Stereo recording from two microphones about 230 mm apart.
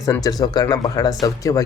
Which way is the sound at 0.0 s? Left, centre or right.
Centre.